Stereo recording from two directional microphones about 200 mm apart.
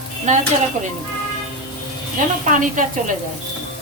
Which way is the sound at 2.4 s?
40° right (ahead or behind).